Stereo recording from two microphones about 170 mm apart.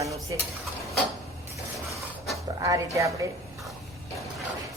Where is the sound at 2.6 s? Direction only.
20° right (ahead or behind).